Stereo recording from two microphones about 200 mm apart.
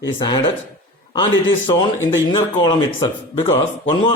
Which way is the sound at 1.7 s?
20° left (ahead or behind).